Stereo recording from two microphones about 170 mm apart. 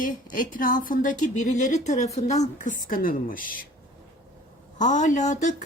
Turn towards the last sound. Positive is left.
turn(degrees=45)  # may be behind; listen again after turning